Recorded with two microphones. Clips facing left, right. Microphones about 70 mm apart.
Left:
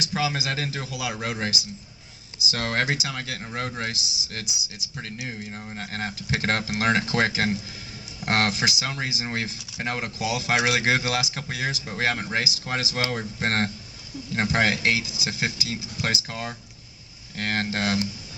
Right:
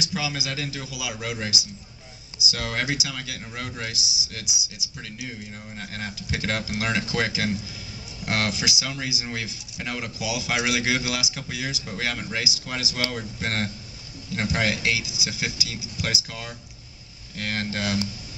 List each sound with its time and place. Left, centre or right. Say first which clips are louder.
0.0 s speech: left 3 dB; left